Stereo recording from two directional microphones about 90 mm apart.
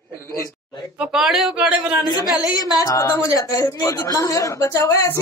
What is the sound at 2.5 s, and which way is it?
Speech, 45° left (ahead or behind).